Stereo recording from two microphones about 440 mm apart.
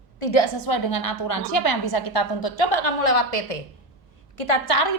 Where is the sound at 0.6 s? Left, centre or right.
Left.